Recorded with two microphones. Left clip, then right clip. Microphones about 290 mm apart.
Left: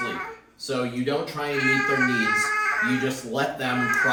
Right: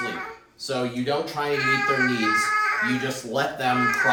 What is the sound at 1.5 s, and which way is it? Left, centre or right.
A child's voice, centre.